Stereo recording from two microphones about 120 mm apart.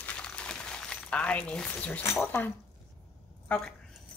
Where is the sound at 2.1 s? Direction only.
15° left (ahead or behind).